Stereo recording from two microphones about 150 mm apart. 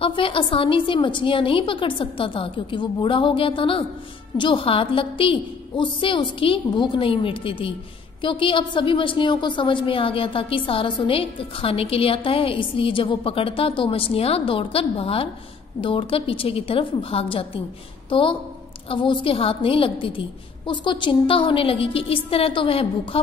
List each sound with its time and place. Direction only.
0.0 s a woman's voice: 35° left (ahead or behind)